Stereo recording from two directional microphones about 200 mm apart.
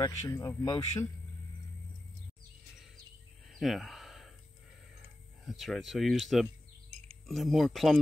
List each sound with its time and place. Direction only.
0.0 s speech: 15° left (ahead or behind)
3.4 s a sound: centre (ahead or behind)
5.4 s speech: centre (ahead or behind)